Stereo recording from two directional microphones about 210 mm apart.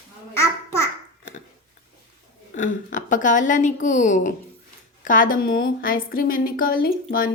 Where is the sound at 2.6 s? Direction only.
40° left (ahead or behind).